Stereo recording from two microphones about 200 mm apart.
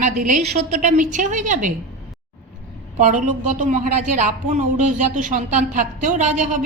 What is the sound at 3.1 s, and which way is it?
Speech, 40° right (ahead or behind).